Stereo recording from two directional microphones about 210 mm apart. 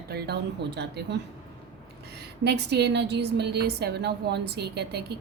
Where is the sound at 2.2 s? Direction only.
50° right (ahead or behind).